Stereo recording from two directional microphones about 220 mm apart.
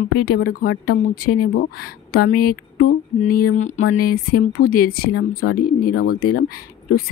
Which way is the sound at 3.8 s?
40° left (ahead or behind).